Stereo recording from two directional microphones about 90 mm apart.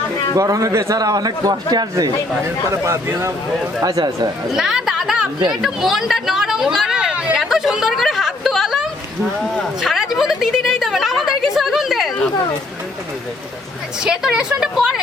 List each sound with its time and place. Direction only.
0.3 s a man's voice: 40° right (ahead or behind)
2.6 s a man's voice: 30° right (ahead or behind)
3.8 s speech: 50° right (ahead or behind)
4.5 s a sound: 5° right (ahead or behind)
14.0 s a woman's voice: 5° right (ahead or behind)